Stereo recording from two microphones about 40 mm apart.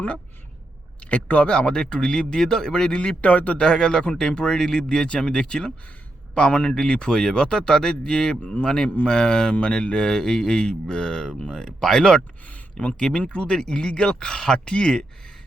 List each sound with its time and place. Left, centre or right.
1.1 s a man's voice: left
1.5 s a man's voice: left
3.2 s a man's voice: left
3.6 s a man's voice: centre
13.1 s a man's voice: left